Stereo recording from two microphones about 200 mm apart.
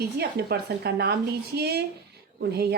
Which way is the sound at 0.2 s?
55° right (ahead or behind).